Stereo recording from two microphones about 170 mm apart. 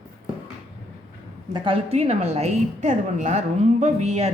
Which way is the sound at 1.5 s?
25° right (ahead or behind).